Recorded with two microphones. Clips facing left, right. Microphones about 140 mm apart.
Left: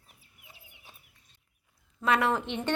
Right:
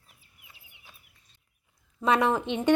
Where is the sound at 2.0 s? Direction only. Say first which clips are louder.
Right 3 dB; 20° right (ahead or behind).